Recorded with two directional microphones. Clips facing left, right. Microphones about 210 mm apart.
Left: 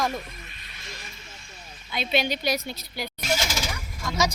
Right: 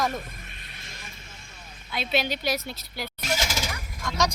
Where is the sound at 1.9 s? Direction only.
Centre (ahead or behind).